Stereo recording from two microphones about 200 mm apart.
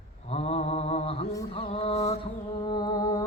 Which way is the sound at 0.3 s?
30° left (ahead or behind).